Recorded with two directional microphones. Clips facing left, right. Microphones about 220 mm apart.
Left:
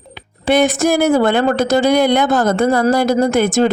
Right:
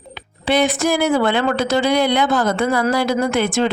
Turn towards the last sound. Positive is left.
turn(degrees=45)  # may be behind; listen again after turning